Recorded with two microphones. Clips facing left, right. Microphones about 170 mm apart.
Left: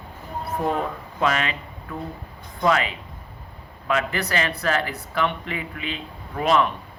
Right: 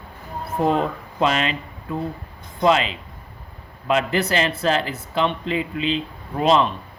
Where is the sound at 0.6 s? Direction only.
25° right (ahead or behind).